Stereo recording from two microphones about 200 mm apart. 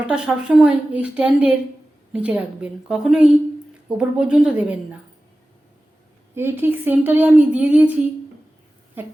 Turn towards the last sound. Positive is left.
turn(degrees=-5)  # may be behind; listen again after turning